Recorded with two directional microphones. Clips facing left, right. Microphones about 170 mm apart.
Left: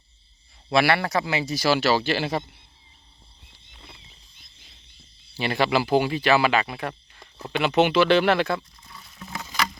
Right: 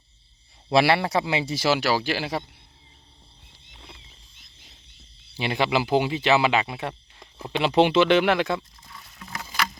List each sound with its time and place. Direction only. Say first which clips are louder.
0.7 s speech: right 1 dB; 30° right (ahead or behind); by 2.4 s 10° right (ahead or behind)
5.4 s speech: left 1 dB; 15° right (ahead or behind)